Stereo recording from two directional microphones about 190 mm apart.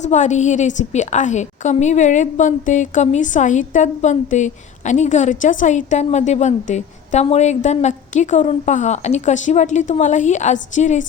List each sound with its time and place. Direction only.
0.0 s a woman's voice: 40° left (ahead or behind)